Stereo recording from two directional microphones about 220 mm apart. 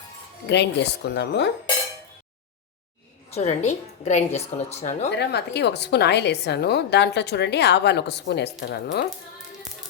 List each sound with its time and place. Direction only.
0.4 s a woman's voice: 50° left (ahead or behind)
3.3 s a woman's voice: 30° left (ahead or behind)
5.1 s a woman's voice: 50° left (ahead or behind)